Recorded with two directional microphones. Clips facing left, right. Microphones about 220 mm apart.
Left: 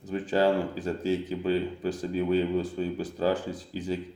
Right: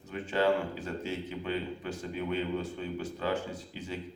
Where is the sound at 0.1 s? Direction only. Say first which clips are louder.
Left 4 dB; 35° left (ahead or behind).